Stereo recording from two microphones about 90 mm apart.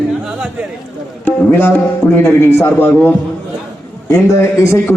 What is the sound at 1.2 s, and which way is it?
A man's voice, 25° left (ahead or behind).